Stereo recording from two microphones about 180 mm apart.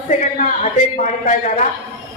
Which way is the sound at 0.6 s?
40° left (ahead or behind).